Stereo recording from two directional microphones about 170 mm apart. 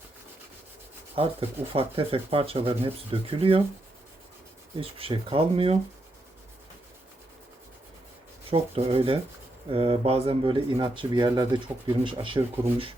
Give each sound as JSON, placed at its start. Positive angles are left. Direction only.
{"t": 1.1, "sound": "speech", "side_deg": -35}
{"t": 4.8, "sound": "speech", "side_deg": -30}
{"t": 8.4, "sound": "speech", "side_deg": -35}